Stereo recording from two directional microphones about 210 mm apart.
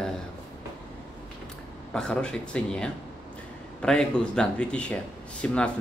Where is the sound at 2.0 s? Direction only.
5° left (ahead or behind).